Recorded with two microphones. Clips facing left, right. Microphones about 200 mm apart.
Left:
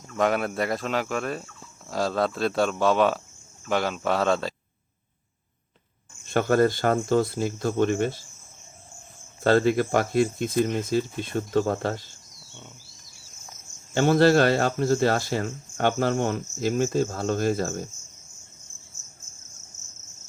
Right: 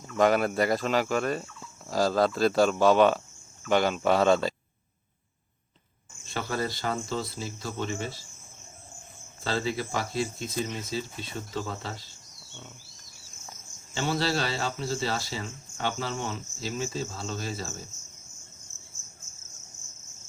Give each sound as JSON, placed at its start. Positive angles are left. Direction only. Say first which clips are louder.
{"t": 0.2, "sound": "speech", "louder": "right 1 dB", "side_deg": 0}
{"t": 6.2, "sound": "speech", "louder": "left 11 dB", "side_deg": 50}
{"t": 9.4, "sound": "speech", "louder": "left 10 dB", "side_deg": 55}
{"t": 13.9, "sound": "speech", "louder": "left 10 dB", "side_deg": 50}